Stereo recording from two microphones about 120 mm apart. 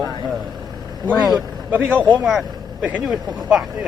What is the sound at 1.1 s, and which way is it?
Speech, centre (ahead or behind).